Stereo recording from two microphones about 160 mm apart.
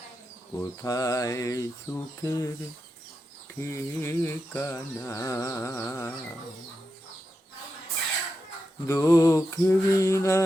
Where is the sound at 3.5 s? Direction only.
15° left (ahead or behind).